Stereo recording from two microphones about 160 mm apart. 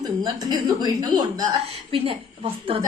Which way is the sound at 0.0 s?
25° right (ahead or behind).